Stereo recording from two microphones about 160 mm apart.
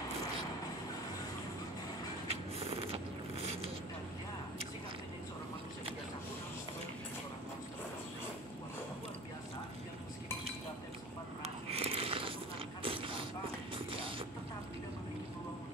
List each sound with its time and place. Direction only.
2.2 s vehicle: 40° right (ahead or behind)
11.4 s a sound: 40° right (ahead or behind)
12.8 s mechanisms: 35° right (ahead or behind)
13.7 s music: 35° right (ahead or behind)